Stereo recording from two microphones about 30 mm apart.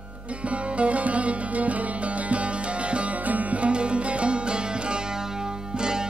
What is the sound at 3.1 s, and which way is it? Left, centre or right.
Sitar, right.